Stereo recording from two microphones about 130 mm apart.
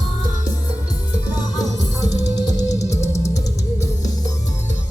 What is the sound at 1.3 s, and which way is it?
Music, 30° left (ahead or behind).